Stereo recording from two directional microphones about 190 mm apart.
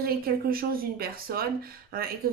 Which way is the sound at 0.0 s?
50° right (ahead or behind).